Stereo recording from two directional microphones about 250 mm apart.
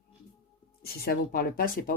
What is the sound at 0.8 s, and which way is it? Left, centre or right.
Speech, left.